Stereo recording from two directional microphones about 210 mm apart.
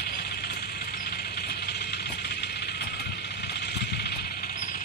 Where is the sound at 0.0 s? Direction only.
50° left (ahead or behind).